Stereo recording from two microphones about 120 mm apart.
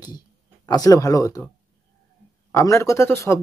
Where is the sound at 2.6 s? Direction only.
25° left (ahead or behind).